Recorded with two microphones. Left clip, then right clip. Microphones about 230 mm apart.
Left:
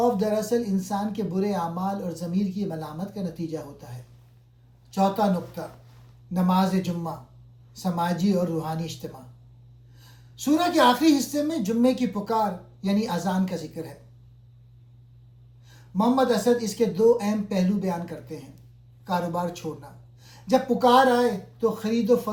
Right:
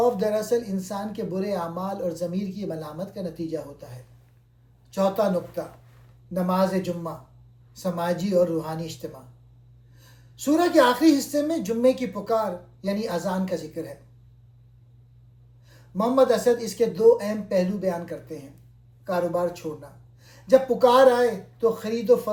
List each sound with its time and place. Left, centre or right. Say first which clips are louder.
0.0 s speech: right 1 dB; centre
16.0 s speech: right 2 dB; centre